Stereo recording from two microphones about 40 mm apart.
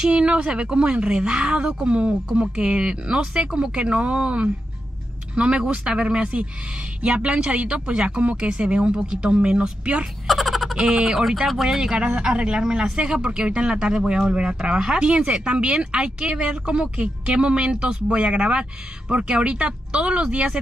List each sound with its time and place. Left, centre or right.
0.0 s speech: right
10.2 s a sound: centre
10.9 s speech: centre